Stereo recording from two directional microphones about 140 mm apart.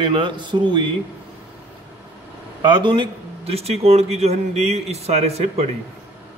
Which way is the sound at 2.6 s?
35° right (ahead or behind).